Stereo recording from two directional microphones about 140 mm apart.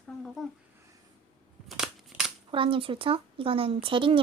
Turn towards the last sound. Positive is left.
turn(degrees=-40)  # may be behind; listen again after turning